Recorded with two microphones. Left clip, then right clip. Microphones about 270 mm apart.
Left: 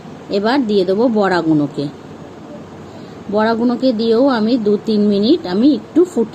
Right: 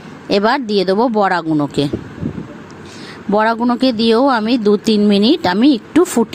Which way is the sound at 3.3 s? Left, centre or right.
Right.